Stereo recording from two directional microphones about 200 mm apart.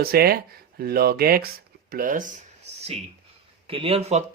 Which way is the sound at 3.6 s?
30° right (ahead or behind).